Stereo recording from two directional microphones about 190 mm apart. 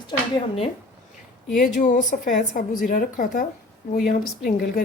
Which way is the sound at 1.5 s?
45° left (ahead or behind).